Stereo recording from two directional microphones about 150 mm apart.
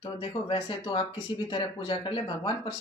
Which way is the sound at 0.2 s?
35° left (ahead or behind).